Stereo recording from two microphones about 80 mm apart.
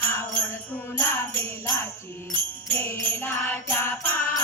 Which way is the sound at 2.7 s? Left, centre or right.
Left.